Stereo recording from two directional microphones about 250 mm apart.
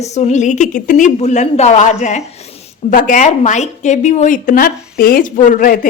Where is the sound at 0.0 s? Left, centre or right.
Left.